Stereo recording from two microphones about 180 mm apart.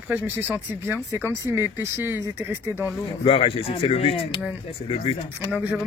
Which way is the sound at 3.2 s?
30° left (ahead or behind).